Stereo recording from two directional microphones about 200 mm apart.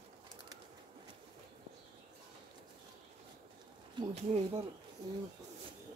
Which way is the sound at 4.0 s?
25° right (ahead or behind).